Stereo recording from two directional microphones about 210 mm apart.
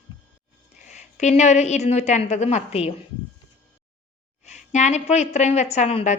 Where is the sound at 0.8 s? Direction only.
35° left (ahead or behind).